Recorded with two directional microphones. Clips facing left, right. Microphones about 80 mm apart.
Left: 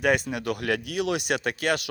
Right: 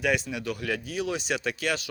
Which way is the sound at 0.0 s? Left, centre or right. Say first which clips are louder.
Left 3 dB; left.